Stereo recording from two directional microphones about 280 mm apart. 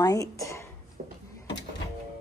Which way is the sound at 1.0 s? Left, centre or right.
Right.